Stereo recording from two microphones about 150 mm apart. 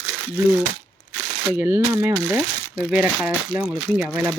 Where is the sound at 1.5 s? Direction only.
15° right (ahead or behind).